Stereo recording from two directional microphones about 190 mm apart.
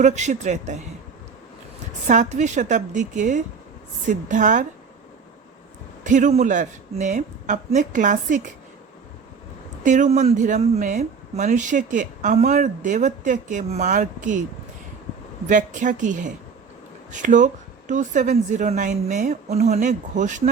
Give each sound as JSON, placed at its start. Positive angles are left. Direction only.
{"t": 0.0, "sound": "speech", "side_deg": -40}
{"t": 2.0, "sound": "speech", "side_deg": -40}
{"t": 6.0, "sound": "speech", "side_deg": -40}
{"t": 9.8, "sound": "speech", "side_deg": -40}
{"t": 15.4, "sound": "speech", "side_deg": -40}